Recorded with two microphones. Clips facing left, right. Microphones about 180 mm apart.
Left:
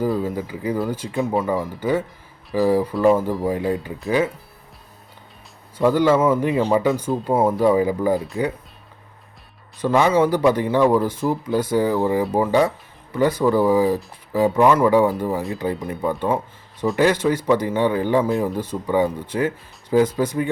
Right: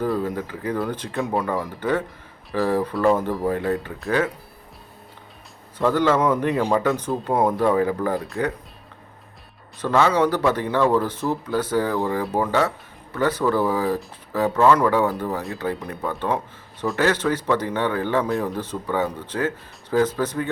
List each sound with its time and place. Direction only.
0.0 s speech: 5° left (ahead or behind)
5.7 s speech: 10° left (ahead or behind)
9.8 s speech: 15° left (ahead or behind)